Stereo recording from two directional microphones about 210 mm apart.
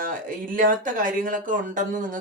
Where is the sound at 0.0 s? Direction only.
40° right (ahead or behind).